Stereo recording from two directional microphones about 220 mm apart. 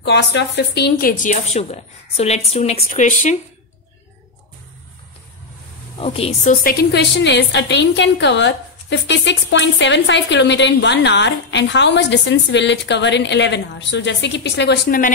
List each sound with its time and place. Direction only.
0.0 s speech: 50° left (ahead or behind); by 3.3 s 35° left (ahead or behind)
5.9 s a woman's voice: 25° left (ahead or behind)
6.6 s a woman's voice: 45° left (ahead or behind)